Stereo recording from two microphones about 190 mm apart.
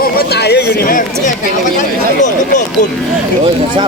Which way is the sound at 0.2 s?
60° left (ahead or behind).